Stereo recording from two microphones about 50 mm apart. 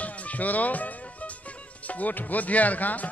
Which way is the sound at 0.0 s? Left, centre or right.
Left.